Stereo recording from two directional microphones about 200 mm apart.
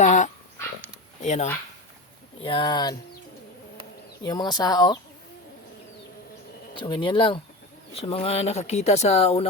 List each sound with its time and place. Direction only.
0.0 s dog: 35° left (ahead or behind)
1.2 s speech: 35° left (ahead or behind)
2.4 s speech: 25° left (ahead or behind)
4.2 s speech: 20° left (ahead or behind)
6.7 s speech: 25° left (ahead or behind)